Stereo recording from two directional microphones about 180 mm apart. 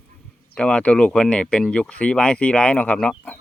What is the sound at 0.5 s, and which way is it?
Speech, 5° left (ahead or behind).